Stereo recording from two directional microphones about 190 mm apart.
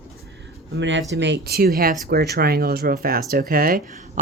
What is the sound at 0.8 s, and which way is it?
Speech, 75° right (ahead or behind).